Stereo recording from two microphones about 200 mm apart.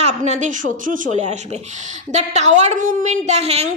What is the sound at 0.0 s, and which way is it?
A woman's voice, 35° right (ahead or behind).